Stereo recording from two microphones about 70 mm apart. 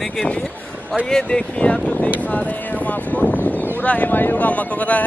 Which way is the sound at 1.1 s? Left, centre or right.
Centre.